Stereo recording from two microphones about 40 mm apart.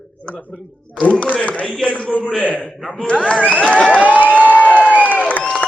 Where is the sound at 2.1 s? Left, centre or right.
Left.